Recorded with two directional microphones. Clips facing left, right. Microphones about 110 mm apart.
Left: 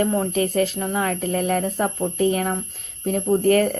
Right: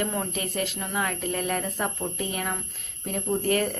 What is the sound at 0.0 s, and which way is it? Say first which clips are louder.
Speech: left 9 dB; 35° left (ahead or behind).